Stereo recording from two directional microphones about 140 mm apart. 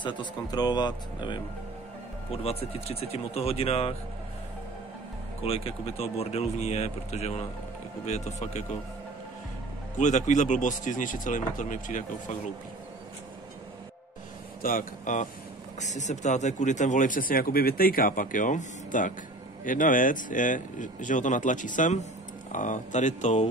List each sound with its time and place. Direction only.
0.0 s speech: 30° left (ahead or behind)
2.3 s speech: 45° left (ahead or behind)
5.4 s speech: 45° left (ahead or behind)
9.9 s speech: 60° left (ahead or behind)
14.6 s speech: 80° left; by 23.4 s 60° left (ahead or behind)